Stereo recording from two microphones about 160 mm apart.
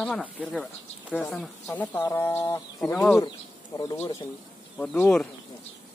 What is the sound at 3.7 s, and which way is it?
Speech, 20° left (ahead or behind).